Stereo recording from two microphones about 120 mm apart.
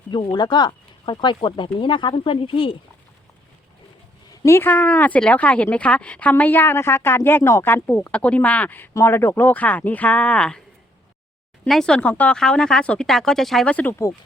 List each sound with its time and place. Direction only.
0.1 s speech: 40° left (ahead or behind)
4.4 s speech: 20° left (ahead or behind)
11.7 s speech: 5° left (ahead or behind)